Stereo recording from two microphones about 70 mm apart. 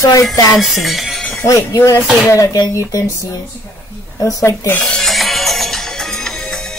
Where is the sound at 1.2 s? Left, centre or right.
Centre.